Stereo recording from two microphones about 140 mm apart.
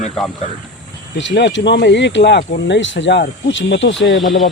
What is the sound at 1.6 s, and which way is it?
Speech, 90° left.